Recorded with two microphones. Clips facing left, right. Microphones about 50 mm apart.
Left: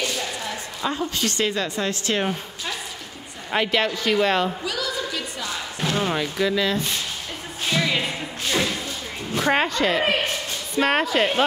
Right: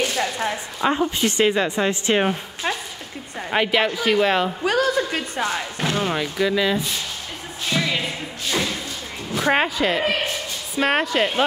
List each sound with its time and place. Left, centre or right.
0.0 s a sound: right
0.8 s speech: right
3.4 s speech: centre
4.6 s a sound: right
5.9 s speech: centre
7.7 s music: centre
9.4 s speech: centre